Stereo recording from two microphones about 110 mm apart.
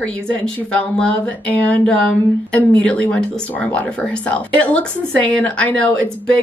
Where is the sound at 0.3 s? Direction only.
10° left (ahead or behind).